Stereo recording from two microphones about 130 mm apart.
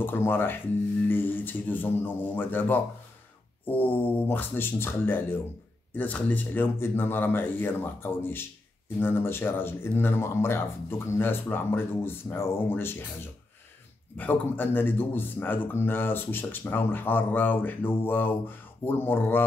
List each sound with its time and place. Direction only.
0.0 s speech: 15° left (ahead or behind)
14.1 s speech: 15° left (ahead or behind)